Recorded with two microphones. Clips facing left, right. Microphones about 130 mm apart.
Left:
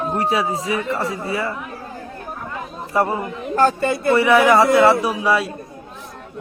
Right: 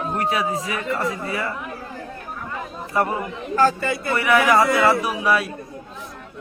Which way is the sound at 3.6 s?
55° left (ahead or behind).